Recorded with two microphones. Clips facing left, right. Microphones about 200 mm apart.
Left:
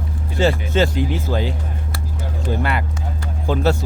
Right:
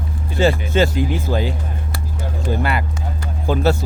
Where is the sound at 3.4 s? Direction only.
10° right (ahead or behind).